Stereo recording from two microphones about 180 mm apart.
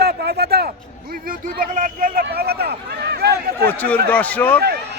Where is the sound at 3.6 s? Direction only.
10° left (ahead or behind).